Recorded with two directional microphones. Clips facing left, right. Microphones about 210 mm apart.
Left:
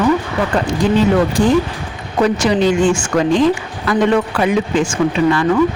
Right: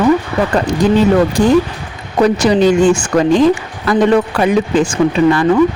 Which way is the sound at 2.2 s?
40° right (ahead or behind).